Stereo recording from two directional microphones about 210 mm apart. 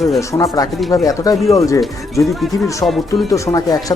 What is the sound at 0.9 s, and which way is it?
Speech, 15° left (ahead or behind).